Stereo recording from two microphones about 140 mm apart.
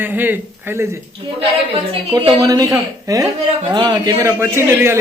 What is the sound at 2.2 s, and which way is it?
A man's voice, 25° right (ahead or behind).